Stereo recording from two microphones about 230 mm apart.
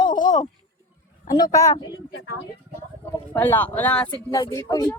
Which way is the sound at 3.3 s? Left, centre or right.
Centre.